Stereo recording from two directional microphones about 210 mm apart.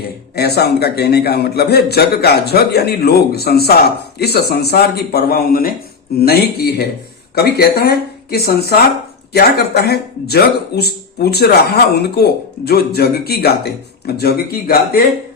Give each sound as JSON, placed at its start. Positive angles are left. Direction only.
{"t": 0.3, "sound": "speech", "side_deg": 50}